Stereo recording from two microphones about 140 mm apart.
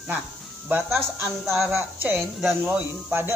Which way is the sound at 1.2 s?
15° right (ahead or behind).